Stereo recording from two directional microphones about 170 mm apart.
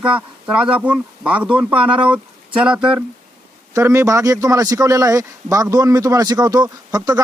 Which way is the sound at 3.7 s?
15° right (ahead or behind).